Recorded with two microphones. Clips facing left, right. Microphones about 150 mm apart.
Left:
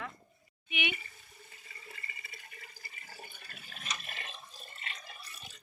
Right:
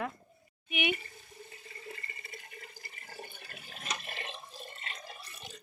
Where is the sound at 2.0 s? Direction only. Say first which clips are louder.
Right 3 dB; 50° right (ahead or behind).